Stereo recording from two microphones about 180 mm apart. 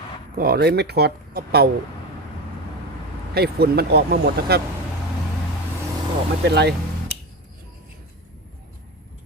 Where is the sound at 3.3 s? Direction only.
60° right (ahead or behind).